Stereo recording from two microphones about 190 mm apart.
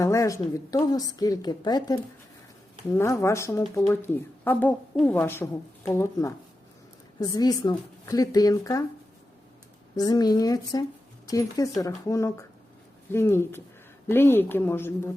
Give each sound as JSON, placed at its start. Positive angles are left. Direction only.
{"t": 0.0, "sound": "a woman's voice", "side_deg": 15}
{"t": 9.9, "sound": "a woman's voice", "side_deg": 20}